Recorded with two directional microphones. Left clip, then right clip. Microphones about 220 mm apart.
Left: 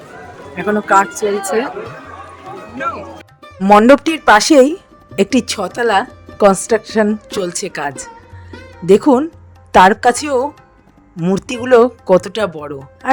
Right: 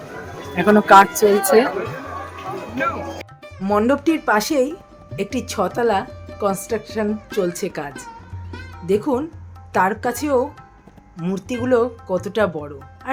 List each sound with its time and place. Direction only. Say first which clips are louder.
0.5 s speech: right 2 dB; 5° right (ahead or behind)
3.6 s speech: left 11 dB; 35° left (ahead or behind)
8.1 s music: left 2 dB; centre (ahead or behind)
8.9 s speech: left 10 dB; 40° left (ahead or behind)